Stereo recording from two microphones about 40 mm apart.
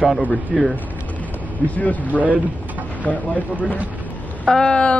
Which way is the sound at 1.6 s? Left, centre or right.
Left.